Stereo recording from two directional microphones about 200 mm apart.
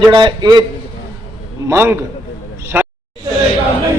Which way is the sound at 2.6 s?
10° right (ahead or behind).